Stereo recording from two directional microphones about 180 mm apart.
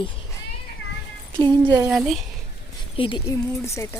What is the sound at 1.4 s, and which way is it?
Speech, 20° right (ahead or behind).